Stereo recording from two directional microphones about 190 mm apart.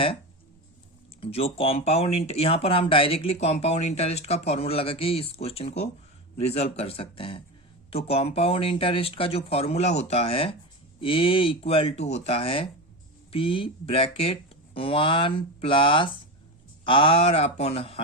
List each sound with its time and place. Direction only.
1.2 s speech: 30° left (ahead or behind)